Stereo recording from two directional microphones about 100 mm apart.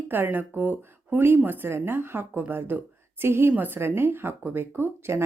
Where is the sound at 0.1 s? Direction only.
20° right (ahead or behind).